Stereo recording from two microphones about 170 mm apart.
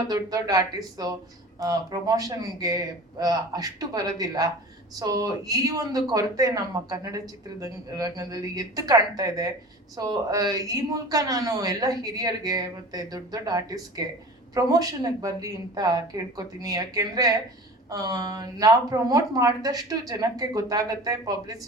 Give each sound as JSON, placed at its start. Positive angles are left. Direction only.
{"t": 0.1, "sound": "speech", "side_deg": -20}